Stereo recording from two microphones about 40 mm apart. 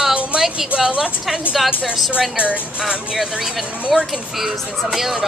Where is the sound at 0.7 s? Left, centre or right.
Right.